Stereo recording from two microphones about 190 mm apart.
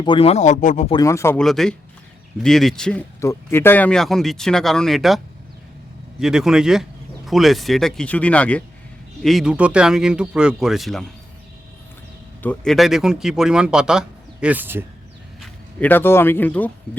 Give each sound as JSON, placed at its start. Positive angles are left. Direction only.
{"t": 0.0, "sound": "speech", "side_deg": 25}
{"t": 0.9, "sound": "speech", "side_deg": 20}
{"t": 1.4, "sound": "speech", "side_deg": 0}
{"t": 12.4, "sound": "speech", "side_deg": 5}
{"t": 15.4, "sound": "speech", "side_deg": 10}